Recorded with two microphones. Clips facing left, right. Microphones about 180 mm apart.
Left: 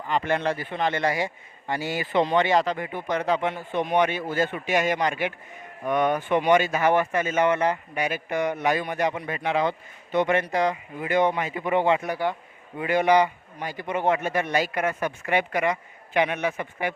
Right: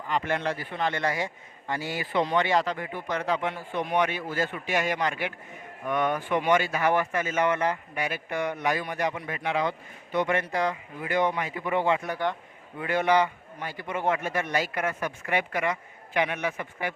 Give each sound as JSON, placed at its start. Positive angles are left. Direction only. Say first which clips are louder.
{"t": 0.1, "sound": "speech", "louder": "left 3 dB", "side_deg": 30}